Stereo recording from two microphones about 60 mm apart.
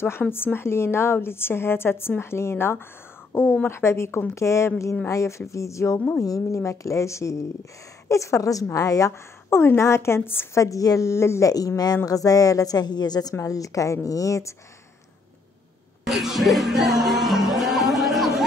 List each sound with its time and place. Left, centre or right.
0.3 s a woman's voice: left
9.5 s a woman's voice: left
10.6 s a woman's voice: left
11.0 s a woman's voice: left
11.4 s a woman's voice: left
16.1 s music: centre